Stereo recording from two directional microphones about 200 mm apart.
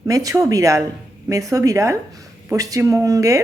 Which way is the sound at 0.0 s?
15° right (ahead or behind).